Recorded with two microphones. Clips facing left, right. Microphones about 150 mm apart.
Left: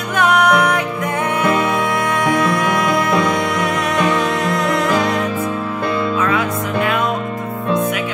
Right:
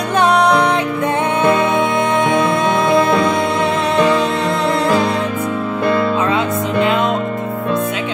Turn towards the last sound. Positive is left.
turn(degrees=-25)  # may be behind; listen again after turning